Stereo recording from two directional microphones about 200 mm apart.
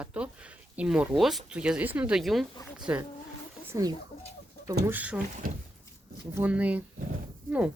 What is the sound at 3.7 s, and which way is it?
Speech, 15° right (ahead or behind).